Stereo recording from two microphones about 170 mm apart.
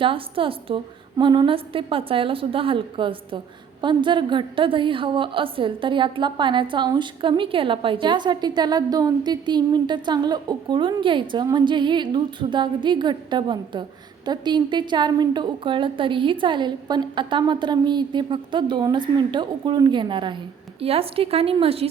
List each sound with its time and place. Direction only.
0.0 s a woman's voice: 30° right (ahead or behind)